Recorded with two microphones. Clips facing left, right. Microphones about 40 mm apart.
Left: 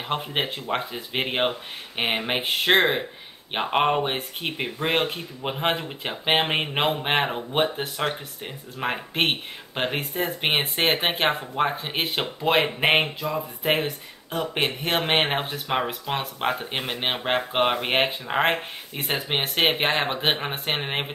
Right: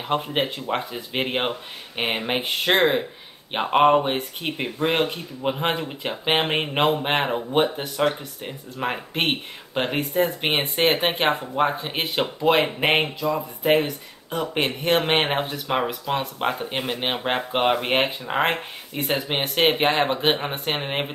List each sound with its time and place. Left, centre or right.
0.0 s speech: centre
15.9 s speech: left
16.3 s speech: centre